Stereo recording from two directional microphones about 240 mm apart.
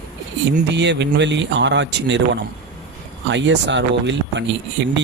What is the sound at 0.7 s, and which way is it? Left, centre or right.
Speech, right.